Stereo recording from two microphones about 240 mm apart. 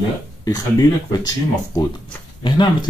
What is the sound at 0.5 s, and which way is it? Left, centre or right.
Speech, centre.